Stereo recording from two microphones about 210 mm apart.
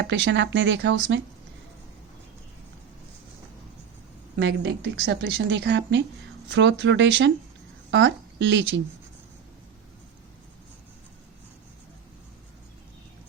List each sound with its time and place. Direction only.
0.0 s a woman's voice: 60° right (ahead or behind)
4.4 s a woman's voice: 55° right (ahead or behind)